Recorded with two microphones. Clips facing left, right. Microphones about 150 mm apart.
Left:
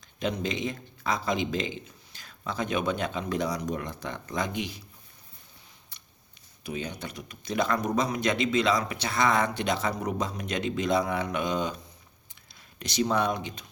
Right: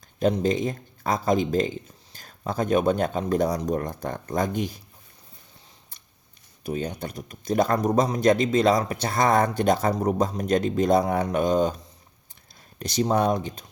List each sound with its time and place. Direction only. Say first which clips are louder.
0.2 s speech: right 7 dB; 45° right (ahead or behind)
6.7 s speech: right 5 dB; 45° right (ahead or behind)
12.8 s speech: right 4 dB; 40° right (ahead or behind)